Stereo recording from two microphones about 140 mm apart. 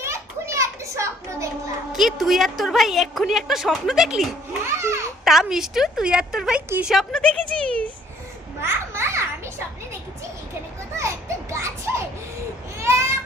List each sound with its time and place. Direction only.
0.0 s children playing: 20° right (ahead or behind)
1.9 s a woman's voice: centre (ahead or behind)
4.6 s babbling: 20° right (ahead or behind)
5.2 s a woman's voice: 5° right (ahead or behind)
6.9 s a woman's voice: 5° left (ahead or behind)
8.6 s children playing: 20° right (ahead or behind)
10.9 s children playing: 20° right (ahead or behind)
12.8 s a sound: 20° right (ahead or behind)